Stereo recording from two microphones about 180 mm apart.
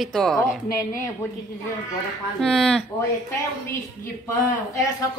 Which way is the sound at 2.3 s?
5° left (ahead or behind).